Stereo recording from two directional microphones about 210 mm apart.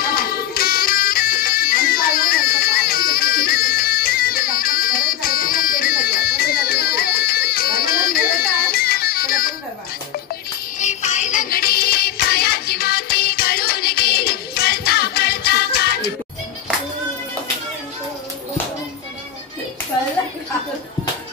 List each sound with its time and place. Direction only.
0.0 s music: 45° left (ahead or behind)
10.8 s music: 35° left (ahead or behind)